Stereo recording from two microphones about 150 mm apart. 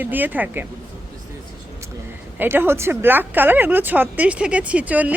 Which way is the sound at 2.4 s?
15° right (ahead or behind).